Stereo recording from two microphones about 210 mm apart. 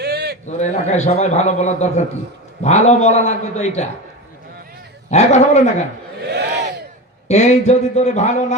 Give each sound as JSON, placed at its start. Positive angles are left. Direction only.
{"t": 0.0, "sound": "a sound", "side_deg": -50}
{"t": 0.4, "sound": "a man's voice", "side_deg": 35}
{"t": 5.1, "sound": "a man's voice", "side_deg": 30}
{"t": 6.3, "sound": "battle cry", "side_deg": -50}
{"t": 7.3, "sound": "a man's voice", "side_deg": 30}